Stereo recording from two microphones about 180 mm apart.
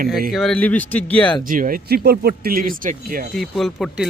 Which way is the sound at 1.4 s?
50° right (ahead or behind).